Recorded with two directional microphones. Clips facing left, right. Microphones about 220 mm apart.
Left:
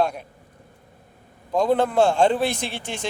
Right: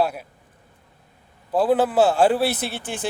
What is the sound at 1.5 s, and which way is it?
A man's voice, 5° right (ahead or behind).